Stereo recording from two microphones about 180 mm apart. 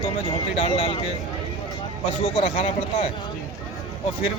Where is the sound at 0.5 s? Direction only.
35° left (ahead or behind).